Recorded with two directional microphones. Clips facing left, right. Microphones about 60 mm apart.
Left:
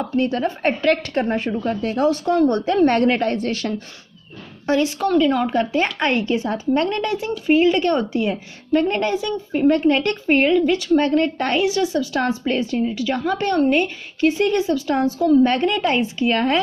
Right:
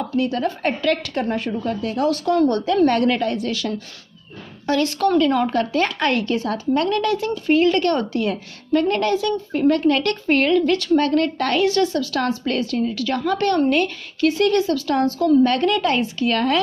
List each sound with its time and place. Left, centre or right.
0.1 s a woman's voice: left
4.6 s a woman's voice: centre